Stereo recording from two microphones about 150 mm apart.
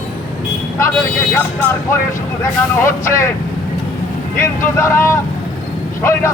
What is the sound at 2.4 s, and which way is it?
Speech, 20° left (ahead or behind).